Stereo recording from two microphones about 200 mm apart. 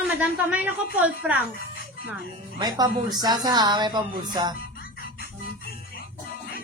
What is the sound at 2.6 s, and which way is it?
Speech, 20° right (ahead or behind).